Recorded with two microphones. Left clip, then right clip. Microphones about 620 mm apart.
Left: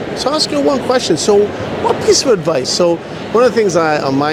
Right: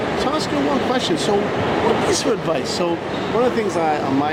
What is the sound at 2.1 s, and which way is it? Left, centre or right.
Speech, left.